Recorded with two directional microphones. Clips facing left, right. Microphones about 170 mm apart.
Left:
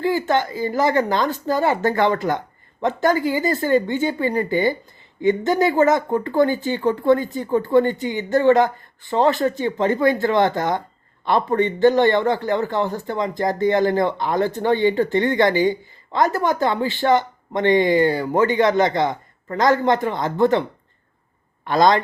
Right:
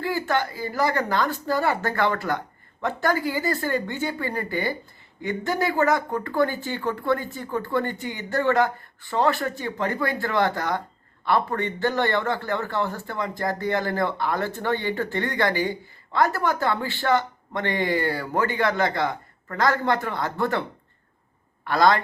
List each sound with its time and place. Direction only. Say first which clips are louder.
0.0 s a man's voice: left 5 dB; 20° left (ahead or behind)